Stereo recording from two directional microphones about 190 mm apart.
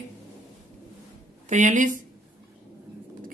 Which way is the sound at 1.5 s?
40° right (ahead or behind).